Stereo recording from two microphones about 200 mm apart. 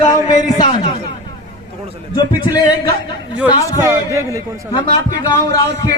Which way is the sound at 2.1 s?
20° left (ahead or behind).